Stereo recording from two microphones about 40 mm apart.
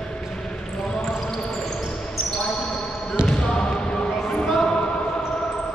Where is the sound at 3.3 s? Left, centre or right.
Centre.